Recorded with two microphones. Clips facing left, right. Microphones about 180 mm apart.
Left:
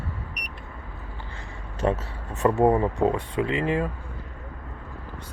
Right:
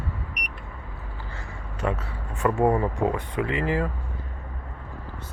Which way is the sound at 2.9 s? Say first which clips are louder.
Left 2 dB; 30° left (ahead or behind).